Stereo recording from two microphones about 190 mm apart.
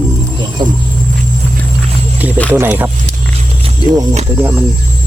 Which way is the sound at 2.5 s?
10° right (ahead or behind).